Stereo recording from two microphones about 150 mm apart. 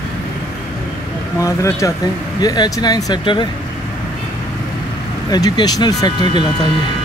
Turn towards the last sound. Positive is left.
turn(degrees=30)  # may be behind; listen again after turning